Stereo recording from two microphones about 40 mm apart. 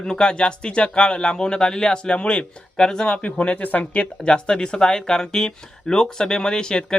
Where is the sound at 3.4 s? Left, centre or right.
Left.